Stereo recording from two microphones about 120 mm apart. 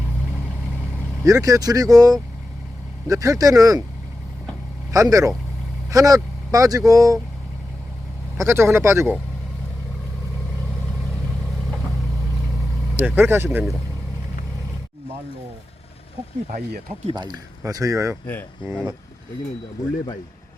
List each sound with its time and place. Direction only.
1.2 s speech: 30° right (ahead or behind)
4.9 s speech: 30° right (ahead or behind)
8.4 s speech: 20° right (ahead or behind)
13.0 s speech: 15° right (ahead or behind)
17.2 s speech: 35° right (ahead or behind)